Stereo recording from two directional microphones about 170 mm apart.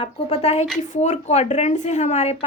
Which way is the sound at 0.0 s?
35° left (ahead or behind).